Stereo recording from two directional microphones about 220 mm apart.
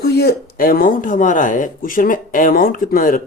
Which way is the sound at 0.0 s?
45° left (ahead or behind).